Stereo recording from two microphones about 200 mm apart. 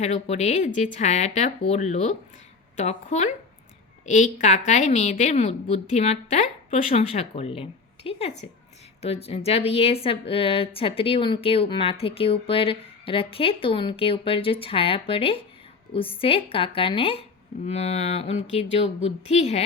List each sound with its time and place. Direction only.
0.0 s a woman's voice: 35° left (ahead or behind)